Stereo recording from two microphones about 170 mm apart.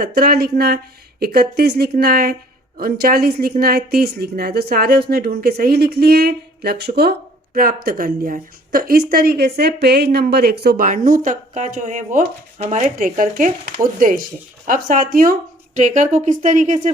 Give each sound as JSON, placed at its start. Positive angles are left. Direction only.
{"t": 0.0, "sound": "speech", "side_deg": -60}